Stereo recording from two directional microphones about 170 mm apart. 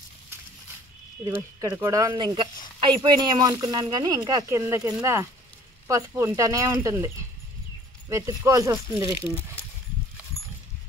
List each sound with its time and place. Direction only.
1.2 s speech: 15° right (ahead or behind)
8.1 s speech: 20° right (ahead or behind)